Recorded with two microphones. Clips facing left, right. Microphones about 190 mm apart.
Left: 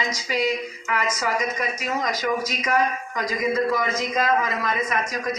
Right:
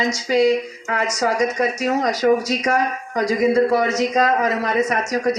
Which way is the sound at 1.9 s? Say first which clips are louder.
Right 8 dB; 35° right (ahead or behind).